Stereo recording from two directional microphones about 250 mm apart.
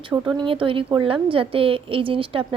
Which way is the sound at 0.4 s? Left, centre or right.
Right.